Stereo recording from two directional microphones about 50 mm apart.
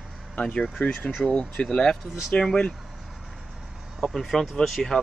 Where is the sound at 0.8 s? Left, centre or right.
Left.